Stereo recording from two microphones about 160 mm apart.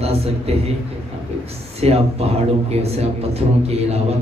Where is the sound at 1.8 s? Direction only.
40° right (ahead or behind).